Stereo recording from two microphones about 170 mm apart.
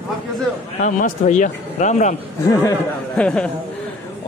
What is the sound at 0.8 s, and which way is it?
Speech, 45° left (ahead or behind).